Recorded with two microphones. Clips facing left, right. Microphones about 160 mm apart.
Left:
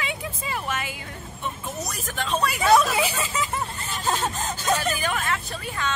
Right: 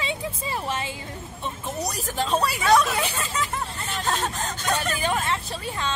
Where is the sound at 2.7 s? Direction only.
5° left (ahead or behind).